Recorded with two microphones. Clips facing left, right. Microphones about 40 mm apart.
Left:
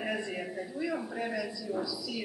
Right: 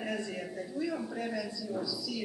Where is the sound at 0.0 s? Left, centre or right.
Centre.